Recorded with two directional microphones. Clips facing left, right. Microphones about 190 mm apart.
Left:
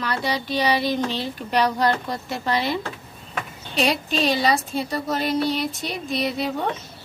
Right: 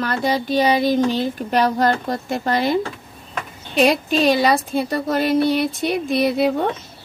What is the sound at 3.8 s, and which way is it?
Speech, 55° right (ahead or behind).